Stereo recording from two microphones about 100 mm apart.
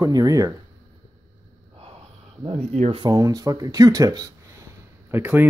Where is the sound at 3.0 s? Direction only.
40° right (ahead or behind).